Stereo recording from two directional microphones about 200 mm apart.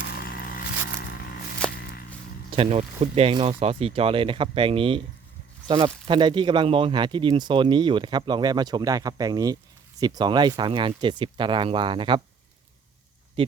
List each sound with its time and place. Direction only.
0.2 s a sound: 50° left (ahead or behind)
1.6 s walk: 5° left (ahead or behind)
2.5 s speech: 30° right (ahead or behind)